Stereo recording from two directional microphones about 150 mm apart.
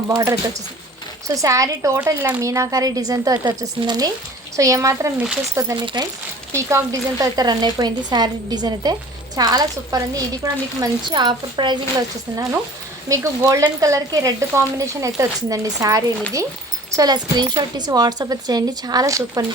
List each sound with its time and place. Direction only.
1.3 s speech: 20° right (ahead or behind)
5.7 s speech: 30° right (ahead or behind)
6.5 s speech: 20° right (ahead or behind)